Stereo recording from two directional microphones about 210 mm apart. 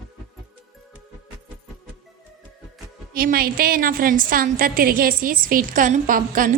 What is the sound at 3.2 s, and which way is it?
A woman's voice, 45° right (ahead or behind).